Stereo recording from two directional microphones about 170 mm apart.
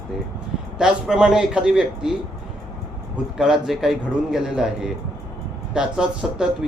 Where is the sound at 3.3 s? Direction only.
5° right (ahead or behind).